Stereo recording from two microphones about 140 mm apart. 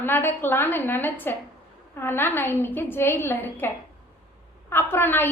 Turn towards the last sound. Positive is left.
turn(degrees=15)  # may be behind; listen again after turning